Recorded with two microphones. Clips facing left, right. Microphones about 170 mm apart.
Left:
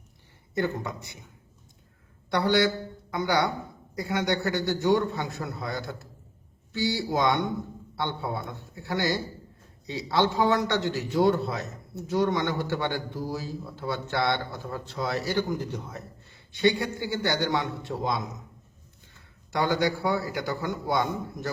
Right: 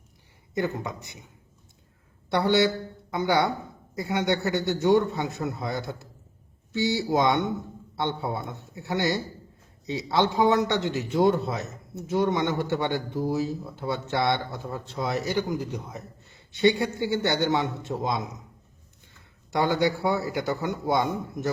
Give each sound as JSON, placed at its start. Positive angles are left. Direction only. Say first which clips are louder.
{"t": 0.5, "sound": "speech", "louder": "even", "side_deg": -15}
{"t": 2.3, "sound": "speech", "louder": "right 1 dB", "side_deg": -25}
{"t": 19.5, "sound": "speech", "louder": "right 2 dB", "side_deg": -20}